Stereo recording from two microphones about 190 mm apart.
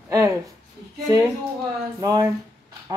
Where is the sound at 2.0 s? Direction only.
20° right (ahead or behind).